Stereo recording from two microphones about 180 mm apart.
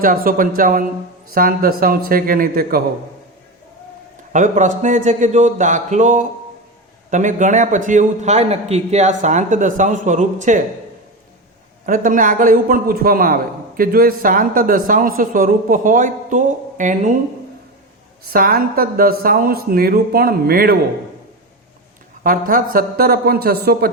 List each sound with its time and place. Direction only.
0.0 s a man's voice: 50° right (ahead or behind)
4.3 s a man's voice: 45° right (ahead or behind)
11.9 s a man's voice: 45° right (ahead or behind)
18.3 s speech: 55° right (ahead or behind)
22.2 s speech: 50° right (ahead or behind)